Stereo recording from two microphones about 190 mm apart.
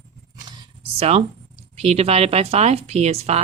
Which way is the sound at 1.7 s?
35° right (ahead or behind).